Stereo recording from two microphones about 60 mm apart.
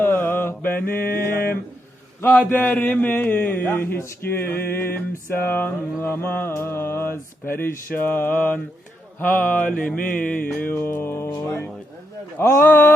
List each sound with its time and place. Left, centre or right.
0.0 s mantra: left
2.2 s a man's voice: left
9.2 s mantra: left
10.5 s a man's voice: left
12.4 s a man's voice: left